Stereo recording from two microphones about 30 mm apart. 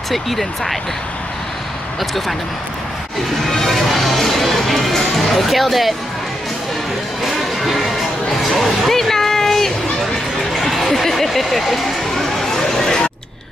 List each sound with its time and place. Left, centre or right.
0.1 s speech: centre
2.0 s speech: centre
3.4 s speech: centre
7.3 s music: centre
8.4 s a sound: centre
10.5 s speech: centre
12.1 s a sound: centre